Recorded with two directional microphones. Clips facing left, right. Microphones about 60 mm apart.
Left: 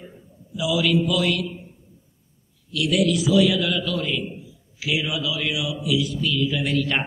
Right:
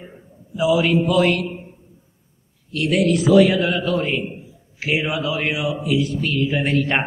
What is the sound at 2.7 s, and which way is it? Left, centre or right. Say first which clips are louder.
A man's voice: right 3 dB; right.